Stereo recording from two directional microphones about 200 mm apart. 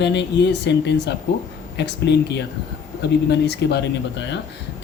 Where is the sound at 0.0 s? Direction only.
60° left (ahead or behind).